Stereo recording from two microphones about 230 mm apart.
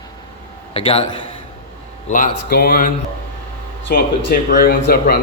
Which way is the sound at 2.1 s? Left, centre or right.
Left.